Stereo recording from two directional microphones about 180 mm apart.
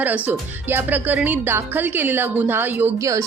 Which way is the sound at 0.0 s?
10° right (ahead or behind).